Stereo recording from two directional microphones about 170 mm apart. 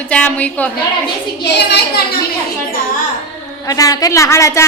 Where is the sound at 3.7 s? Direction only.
20° left (ahead or behind).